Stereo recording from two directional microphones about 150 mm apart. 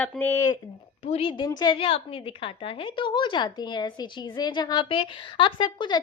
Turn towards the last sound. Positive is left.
turn(degrees=30)  # may be behind; listen again after turning